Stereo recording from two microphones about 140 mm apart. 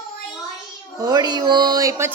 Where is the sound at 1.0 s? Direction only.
25° right (ahead or behind).